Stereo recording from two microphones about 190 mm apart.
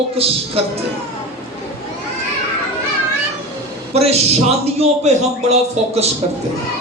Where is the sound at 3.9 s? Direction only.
35° right (ahead or behind).